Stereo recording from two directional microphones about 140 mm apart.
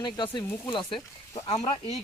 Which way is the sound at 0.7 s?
35° left (ahead or behind).